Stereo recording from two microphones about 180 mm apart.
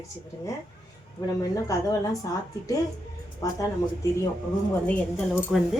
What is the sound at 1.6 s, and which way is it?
A woman's voice, 20° left (ahead or behind).